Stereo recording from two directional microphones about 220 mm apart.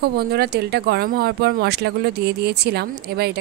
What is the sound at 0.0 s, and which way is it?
Speech, 45° right (ahead or behind).